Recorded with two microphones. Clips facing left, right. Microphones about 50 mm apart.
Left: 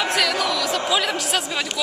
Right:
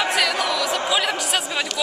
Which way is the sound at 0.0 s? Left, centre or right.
Centre.